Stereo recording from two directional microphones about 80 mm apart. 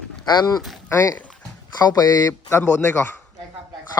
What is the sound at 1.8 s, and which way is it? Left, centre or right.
Speech, left.